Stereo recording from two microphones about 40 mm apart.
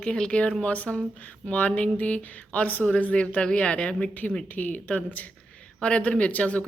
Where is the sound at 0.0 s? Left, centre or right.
Left.